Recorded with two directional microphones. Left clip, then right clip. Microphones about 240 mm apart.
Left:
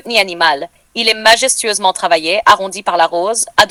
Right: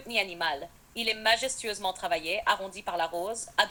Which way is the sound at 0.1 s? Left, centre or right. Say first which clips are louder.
Left 17 dB; left.